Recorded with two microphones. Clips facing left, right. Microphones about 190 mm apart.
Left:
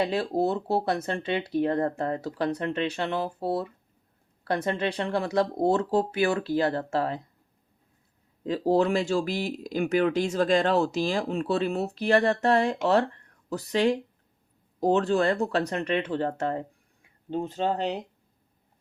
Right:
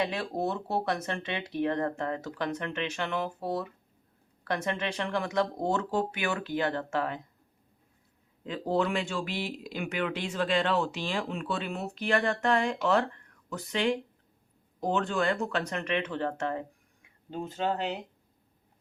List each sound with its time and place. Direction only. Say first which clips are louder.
0.0 s speech: left 5 dB; 30° left (ahead or behind)
8.4 s speech: left 6 dB; 35° left (ahead or behind)